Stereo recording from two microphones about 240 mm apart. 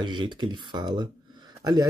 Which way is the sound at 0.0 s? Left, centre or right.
Centre.